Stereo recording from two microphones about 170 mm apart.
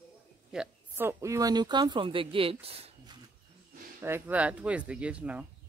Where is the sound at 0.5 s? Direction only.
10° right (ahead or behind); by 3.1 s 35° right (ahead or behind).